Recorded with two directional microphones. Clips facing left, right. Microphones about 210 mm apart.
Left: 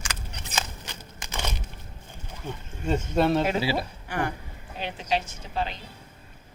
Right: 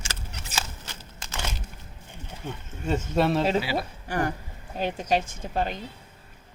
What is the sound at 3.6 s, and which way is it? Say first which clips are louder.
Speech: left 2 dB; 30° left (ahead or behind).